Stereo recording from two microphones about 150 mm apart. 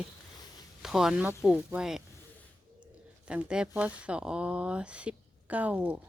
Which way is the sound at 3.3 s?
5° right (ahead or behind).